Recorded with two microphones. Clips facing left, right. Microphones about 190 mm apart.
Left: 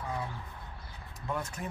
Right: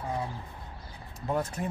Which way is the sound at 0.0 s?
30° right (ahead or behind).